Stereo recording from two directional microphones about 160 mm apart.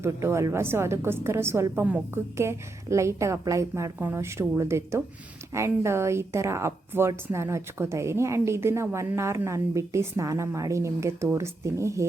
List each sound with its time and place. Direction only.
0.0 s a woman's voice: 15° right (ahead or behind)